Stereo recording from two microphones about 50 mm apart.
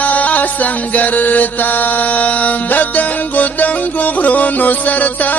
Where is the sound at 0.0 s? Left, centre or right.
Left.